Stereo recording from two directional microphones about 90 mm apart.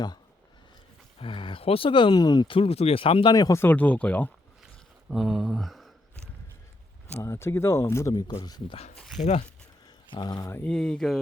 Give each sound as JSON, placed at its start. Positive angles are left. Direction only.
{"t": 1.2, "sound": "speech", "side_deg": 70}
{"t": 2.5, "sound": "speech", "side_deg": 90}
{"t": 3.5, "sound": "speech", "side_deg": 25}
{"t": 5.0, "sound": "speech", "side_deg": 0}
{"t": 7.2, "sound": "speech", "side_deg": 30}
{"t": 8.4, "sound": "speech", "side_deg": 45}
{"t": 9.0, "sound": "speech", "side_deg": 0}
{"t": 10.1, "sound": "speech", "side_deg": 50}
{"t": 10.7, "sound": "speech", "side_deg": 10}